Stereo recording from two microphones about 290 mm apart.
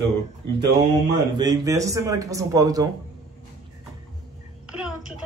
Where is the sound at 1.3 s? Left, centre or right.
Centre.